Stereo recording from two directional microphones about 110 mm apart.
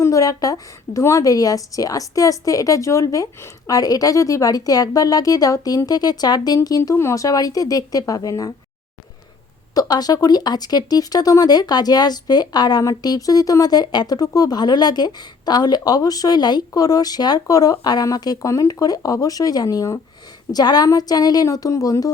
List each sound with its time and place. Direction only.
0.0 s speech: 30° left (ahead or behind)
9.7 s speech: 35° left (ahead or behind)